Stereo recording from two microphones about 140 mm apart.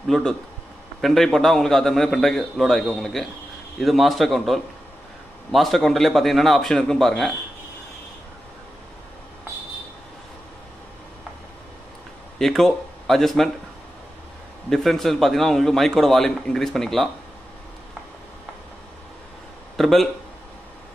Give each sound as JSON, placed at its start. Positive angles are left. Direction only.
{"t": 0.1, "sound": "a man's voice", "side_deg": 5}
{"t": 12.4, "sound": "speech", "side_deg": 0}
{"t": 14.7, "sound": "a man's voice", "side_deg": 0}
{"t": 19.8, "sound": "a man's voice", "side_deg": 0}